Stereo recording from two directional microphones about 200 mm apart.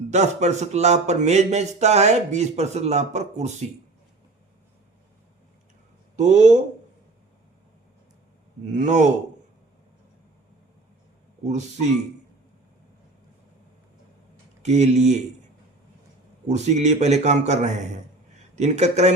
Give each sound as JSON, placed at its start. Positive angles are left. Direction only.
{"t": 0.1, "sound": "a man's voice", "side_deg": -35}
{"t": 6.1, "sound": "a man's voice", "side_deg": -35}
{"t": 8.7, "sound": "a man's voice", "side_deg": -35}
{"t": 11.4, "sound": "a man's voice", "side_deg": -35}
{"t": 14.6, "sound": "a man's voice", "side_deg": -35}
{"t": 16.5, "sound": "a man's voice", "side_deg": -35}